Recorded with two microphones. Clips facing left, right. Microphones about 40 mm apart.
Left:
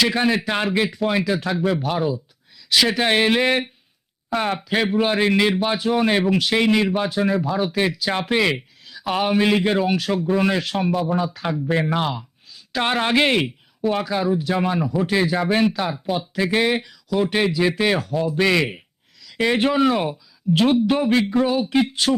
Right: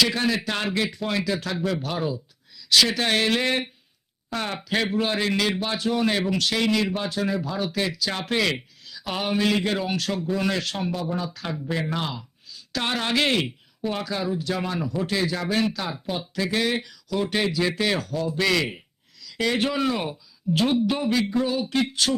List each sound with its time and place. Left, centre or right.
0.1 s speech: left
0.9 s speech: centre
4.5 s speech: centre
10.2 s speech: left
10.6 s speech: centre
16.5 s speech: left
20.5 s speech: left
21.2 s speech: left
21.7 s speech: centre